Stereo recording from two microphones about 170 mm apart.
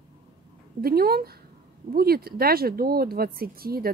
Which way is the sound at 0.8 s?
65° right (ahead or behind).